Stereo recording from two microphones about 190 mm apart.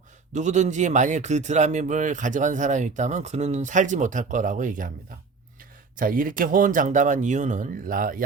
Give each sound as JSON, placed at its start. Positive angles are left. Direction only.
{"t": 0.3, "sound": "speech", "side_deg": -40}
{"t": 6.0, "sound": "speech", "side_deg": -45}